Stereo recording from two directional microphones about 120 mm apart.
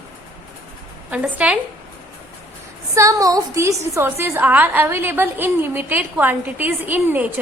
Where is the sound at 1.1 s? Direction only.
10° right (ahead or behind).